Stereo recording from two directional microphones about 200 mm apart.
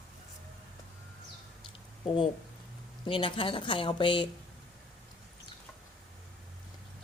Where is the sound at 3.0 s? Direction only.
25° left (ahead or behind).